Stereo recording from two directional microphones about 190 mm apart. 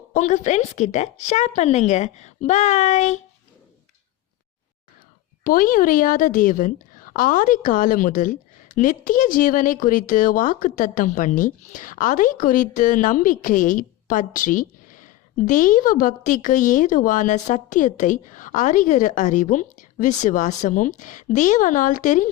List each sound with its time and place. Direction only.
0.1 s speech: 40° left (ahead or behind)
5.4 s a woman's voice: 50° left (ahead or behind)